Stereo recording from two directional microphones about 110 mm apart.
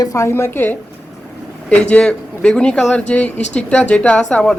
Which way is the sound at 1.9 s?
10° left (ahead or behind).